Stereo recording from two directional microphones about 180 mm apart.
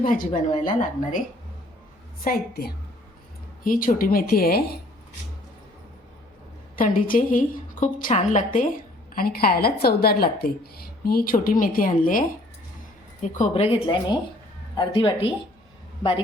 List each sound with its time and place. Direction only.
0.0 s a woman's voice: 50° left (ahead or behind)
2.2 s a woman's voice: 55° left (ahead or behind)
3.6 s a woman's voice: 50° left (ahead or behind)
6.7 s a woman's voice: 50° left (ahead or behind)
9.1 s a woman's voice: 55° left (ahead or behind)
13.3 s a woman's voice: 40° left (ahead or behind)